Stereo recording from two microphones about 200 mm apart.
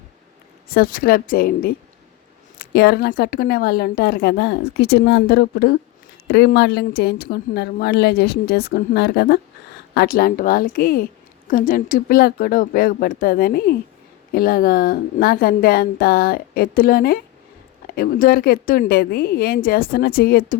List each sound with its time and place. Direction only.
0.7 s speech: 45° left (ahead or behind)